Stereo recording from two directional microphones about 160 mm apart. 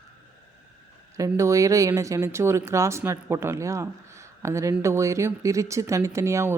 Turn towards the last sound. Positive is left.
turn(degrees=-20)  # may be behind; listen again after turning